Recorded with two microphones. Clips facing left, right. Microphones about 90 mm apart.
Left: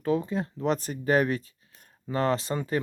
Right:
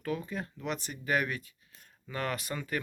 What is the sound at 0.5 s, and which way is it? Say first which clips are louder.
Speech: left 9 dB; 35° left (ahead or behind).